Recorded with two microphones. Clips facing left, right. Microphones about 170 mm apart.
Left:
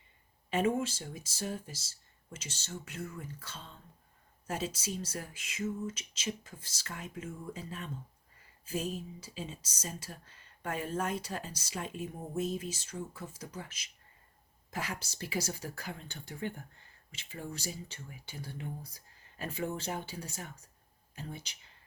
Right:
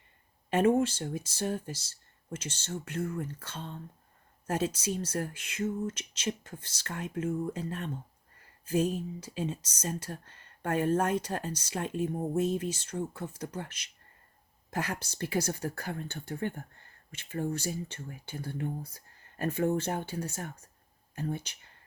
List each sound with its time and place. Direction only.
0.5 s speech: 60° right (ahead or behind)
9.2 s speech: 55° right (ahead or behind)